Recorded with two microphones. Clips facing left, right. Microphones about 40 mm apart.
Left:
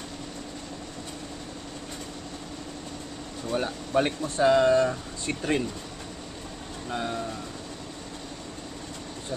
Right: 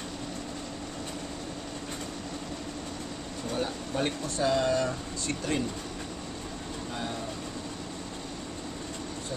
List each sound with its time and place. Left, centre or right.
3.9 s speech: left
6.9 s vehicle: centre